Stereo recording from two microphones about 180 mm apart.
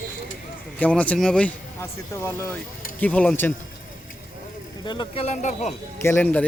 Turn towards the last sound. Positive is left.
turn(degrees=10)  # may be behind; listen again after turning